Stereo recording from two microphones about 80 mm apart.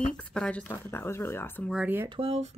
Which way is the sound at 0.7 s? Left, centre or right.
Left.